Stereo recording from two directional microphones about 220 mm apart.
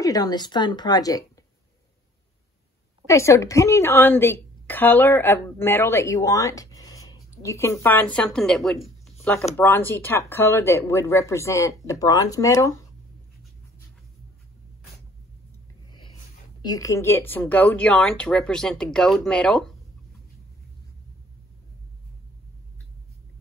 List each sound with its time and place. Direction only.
0.0 s a woman's voice: 15° left (ahead or behind)
3.1 s a woman's voice: 15° left (ahead or behind)
16.6 s speech: 15° left (ahead or behind)